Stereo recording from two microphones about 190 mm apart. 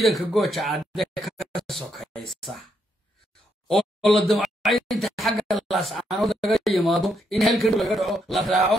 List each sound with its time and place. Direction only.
0.0 s a man's voice: centre (ahead or behind)
3.6 s a man's voice: centre (ahead or behind)